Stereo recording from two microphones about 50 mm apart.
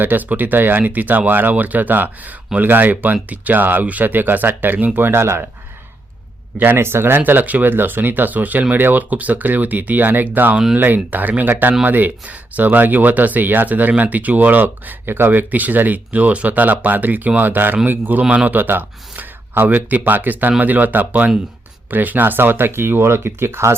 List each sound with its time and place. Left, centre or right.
0.0 s speech: right
6.6 s speech: right
7.2 s speech: right
18.2 s speech: right
18.5 s speech: right